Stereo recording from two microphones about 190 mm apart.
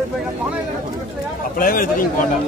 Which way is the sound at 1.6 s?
50° left (ahead or behind).